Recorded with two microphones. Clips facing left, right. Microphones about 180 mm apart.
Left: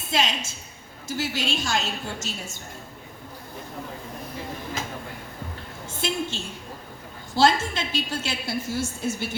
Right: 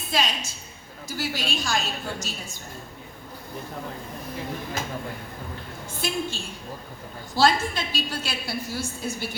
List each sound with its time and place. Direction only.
0.1 s a woman's voice: 20° left (ahead or behind)
5.9 s a woman's voice: 20° left (ahead or behind)